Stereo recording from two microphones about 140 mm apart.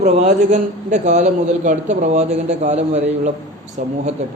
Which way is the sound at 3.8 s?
65° right (ahead or behind).